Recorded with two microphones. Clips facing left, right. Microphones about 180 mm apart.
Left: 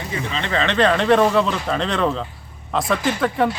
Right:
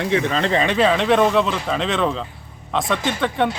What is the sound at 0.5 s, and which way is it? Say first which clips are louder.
Speech: left 1 dB; 10° right (ahead or behind).